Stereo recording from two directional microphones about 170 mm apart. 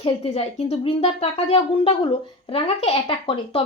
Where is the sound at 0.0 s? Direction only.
35° left (ahead or behind).